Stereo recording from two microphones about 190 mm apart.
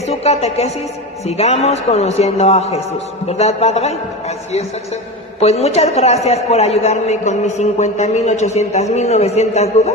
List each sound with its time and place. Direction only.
0.1 s a woman's voice: 35° left (ahead or behind)
5.4 s a man's voice: 35° left (ahead or behind)